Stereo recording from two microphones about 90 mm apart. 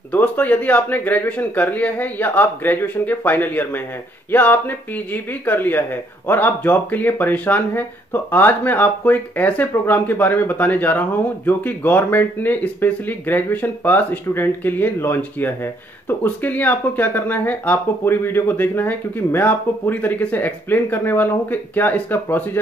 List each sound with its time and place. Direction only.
0.1 s speech: 20° left (ahead or behind)